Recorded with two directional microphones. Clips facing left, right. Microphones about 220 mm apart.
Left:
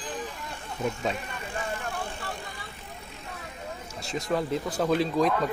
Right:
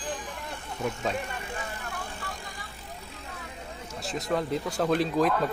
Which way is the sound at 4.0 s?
Centre (ahead or behind).